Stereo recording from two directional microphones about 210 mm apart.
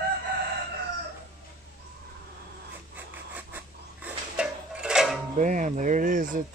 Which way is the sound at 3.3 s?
5° right (ahead or behind).